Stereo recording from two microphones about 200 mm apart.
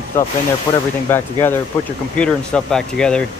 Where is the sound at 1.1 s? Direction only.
10° left (ahead or behind).